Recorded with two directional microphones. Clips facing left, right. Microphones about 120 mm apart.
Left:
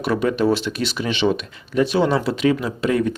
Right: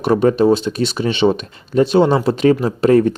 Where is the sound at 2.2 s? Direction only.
40° right (ahead or behind).